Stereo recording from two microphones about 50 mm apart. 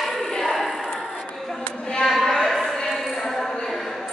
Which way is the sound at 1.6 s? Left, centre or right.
Centre.